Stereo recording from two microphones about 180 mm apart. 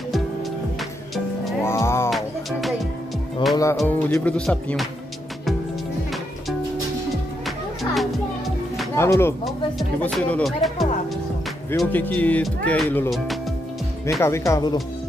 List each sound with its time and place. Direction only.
1.6 s music: 15° left (ahead or behind)
2.0 s music: centre (ahead or behind)
3.8 s speech: 10° left (ahead or behind)
7.4 s music: centre (ahead or behind)
8.9 s speech: 15° left (ahead or behind)
9.4 s speech: centre (ahead or behind)
14.2 s speech: 15° left (ahead or behind)